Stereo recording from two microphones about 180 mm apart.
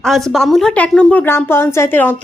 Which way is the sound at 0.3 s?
Centre (ahead or behind).